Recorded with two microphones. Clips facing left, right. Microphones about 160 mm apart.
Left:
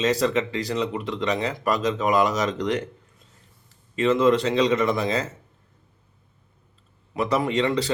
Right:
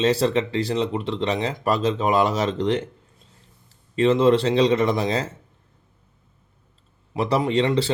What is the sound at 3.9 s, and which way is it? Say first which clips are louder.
Speech: right 2 dB; 30° right (ahead or behind).